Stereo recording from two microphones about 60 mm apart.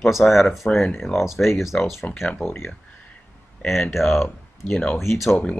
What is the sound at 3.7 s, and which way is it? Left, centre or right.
Speech, centre.